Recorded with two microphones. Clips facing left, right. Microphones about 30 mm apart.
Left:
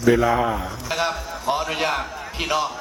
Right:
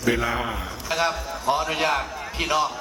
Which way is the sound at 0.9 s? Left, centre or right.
Centre.